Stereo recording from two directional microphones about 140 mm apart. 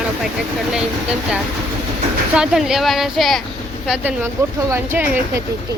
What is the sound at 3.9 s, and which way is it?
A woman's voice, 10° right (ahead or behind).